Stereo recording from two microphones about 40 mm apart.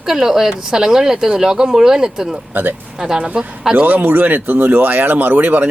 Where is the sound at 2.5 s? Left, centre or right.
Right.